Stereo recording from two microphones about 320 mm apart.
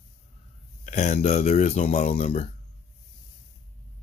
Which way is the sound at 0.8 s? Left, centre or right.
Left.